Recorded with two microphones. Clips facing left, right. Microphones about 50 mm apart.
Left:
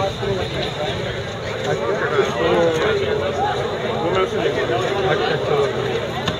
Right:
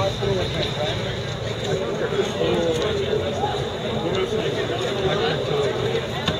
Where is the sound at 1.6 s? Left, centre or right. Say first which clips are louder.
Left 4 dB; left.